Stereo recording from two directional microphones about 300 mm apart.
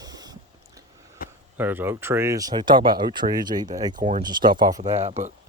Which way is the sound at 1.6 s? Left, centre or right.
Centre.